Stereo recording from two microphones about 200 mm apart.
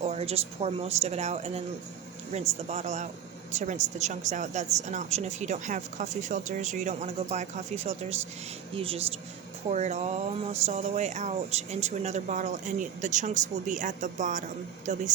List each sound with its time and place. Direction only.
0.0 s a woman's voice: 30° right (ahead or behind)
2.6 s a woman's voice: 35° right (ahead or behind)